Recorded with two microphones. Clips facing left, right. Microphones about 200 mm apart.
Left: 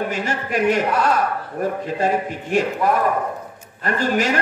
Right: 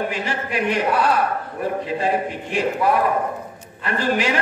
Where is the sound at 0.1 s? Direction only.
45° left (ahead or behind).